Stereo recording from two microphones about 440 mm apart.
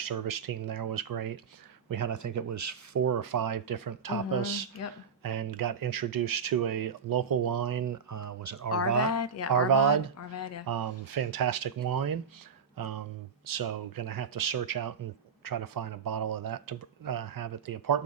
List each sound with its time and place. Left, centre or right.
0.0 s speech: right
4.8 s speech: left
5.2 s speech: right
9.0 s speech: left
10.7 s speech: right